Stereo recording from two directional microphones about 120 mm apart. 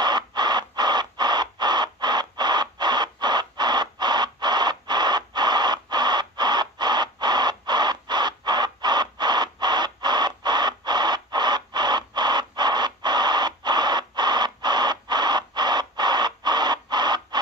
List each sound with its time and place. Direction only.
0.0 s crow: 35° right (ahead or behind)